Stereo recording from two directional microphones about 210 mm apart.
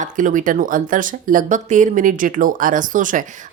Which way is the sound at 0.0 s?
40° right (ahead or behind).